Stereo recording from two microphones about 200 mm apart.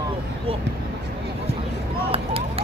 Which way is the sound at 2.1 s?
30° right (ahead or behind).